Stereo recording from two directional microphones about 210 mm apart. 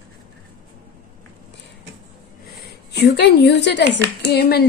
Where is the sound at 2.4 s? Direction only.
50° left (ahead or behind).